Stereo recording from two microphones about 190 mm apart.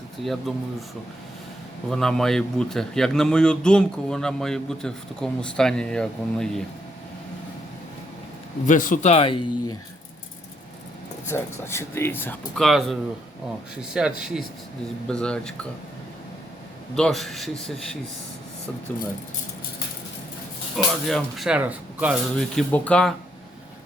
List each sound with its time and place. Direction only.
0.3 s a man's voice: centre (ahead or behind)
1.9 s a man's voice: centre (ahead or behind)
8.6 s speech: 45° left (ahead or behind); by 9.7 s 30° left (ahead or behind)
11.3 s a man's voice: 15° left (ahead or behind)
16.9 s a man's voice: centre (ahead or behind)
20.7 s a man's voice: centre (ahead or behind)
22.4 s a man's voice: 5° left (ahead or behind)